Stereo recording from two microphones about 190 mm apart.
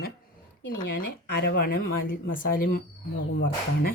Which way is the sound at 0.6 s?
60° left (ahead or behind).